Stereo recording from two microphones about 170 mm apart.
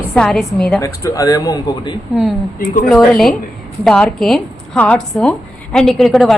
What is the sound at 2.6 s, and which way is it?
Speech, 55° left (ahead or behind).